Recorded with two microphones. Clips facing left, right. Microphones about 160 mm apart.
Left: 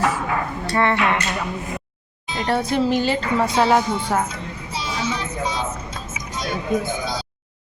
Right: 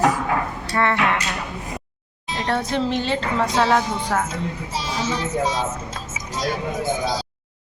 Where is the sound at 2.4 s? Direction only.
Centre (ahead or behind).